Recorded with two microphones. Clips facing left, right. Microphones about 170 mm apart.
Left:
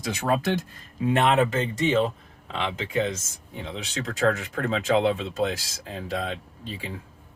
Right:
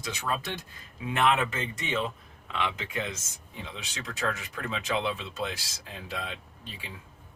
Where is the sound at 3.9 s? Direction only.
50° left (ahead or behind).